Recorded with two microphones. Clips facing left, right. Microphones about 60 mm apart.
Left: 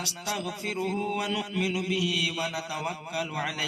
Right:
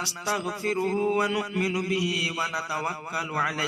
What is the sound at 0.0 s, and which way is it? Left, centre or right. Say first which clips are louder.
A man's voice: right 4 dB; right.